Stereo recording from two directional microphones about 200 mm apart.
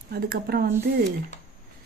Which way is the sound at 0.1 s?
50° right (ahead or behind).